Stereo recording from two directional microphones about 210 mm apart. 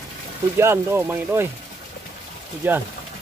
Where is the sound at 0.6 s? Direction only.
10° right (ahead or behind).